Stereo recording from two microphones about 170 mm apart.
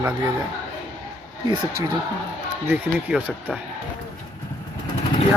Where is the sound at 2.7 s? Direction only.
10° right (ahead or behind).